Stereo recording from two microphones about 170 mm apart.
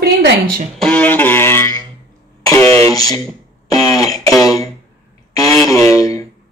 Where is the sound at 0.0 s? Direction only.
65° right (ahead or behind).